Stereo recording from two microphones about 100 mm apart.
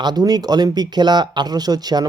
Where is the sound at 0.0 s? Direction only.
45° right (ahead or behind).